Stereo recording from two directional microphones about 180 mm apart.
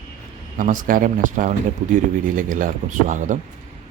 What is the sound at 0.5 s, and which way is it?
Speech, 45° right (ahead or behind).